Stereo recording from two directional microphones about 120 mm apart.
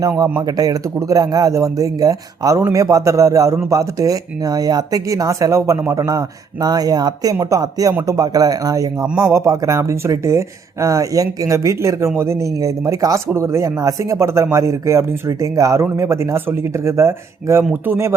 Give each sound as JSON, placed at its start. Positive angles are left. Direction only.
{"t": 0.3, "sound": "speech", "side_deg": -30}